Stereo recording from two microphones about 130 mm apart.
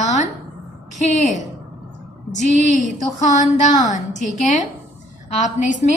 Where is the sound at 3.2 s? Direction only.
65° left (ahead or behind).